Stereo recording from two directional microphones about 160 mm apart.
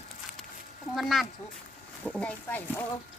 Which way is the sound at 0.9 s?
Centre (ahead or behind).